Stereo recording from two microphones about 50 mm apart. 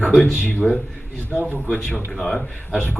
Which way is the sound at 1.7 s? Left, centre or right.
Centre.